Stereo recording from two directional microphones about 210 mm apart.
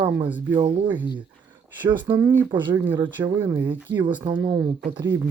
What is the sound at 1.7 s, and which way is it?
Speech, 10° right (ahead or behind).